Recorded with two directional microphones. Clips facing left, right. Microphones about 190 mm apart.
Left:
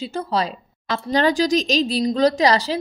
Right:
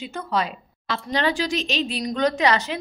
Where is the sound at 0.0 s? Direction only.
35° left (ahead or behind).